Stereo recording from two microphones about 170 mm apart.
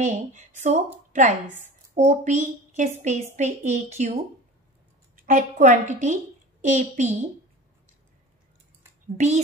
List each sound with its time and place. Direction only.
0.0 s a woman's voice: 45° right (ahead or behind)
9.1 s a woman's voice: 45° right (ahead or behind)